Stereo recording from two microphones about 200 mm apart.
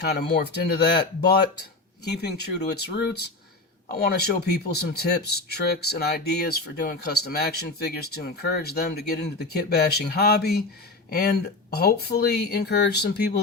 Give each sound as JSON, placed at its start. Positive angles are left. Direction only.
{"t": 0.0, "sound": "speech", "side_deg": 55}
{"t": 2.0, "sound": "speech", "side_deg": 55}